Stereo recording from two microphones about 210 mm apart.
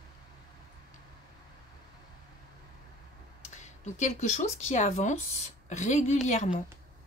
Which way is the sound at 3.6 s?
35° left (ahead or behind).